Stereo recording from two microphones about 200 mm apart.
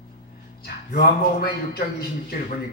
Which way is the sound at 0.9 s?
50° left (ahead or behind).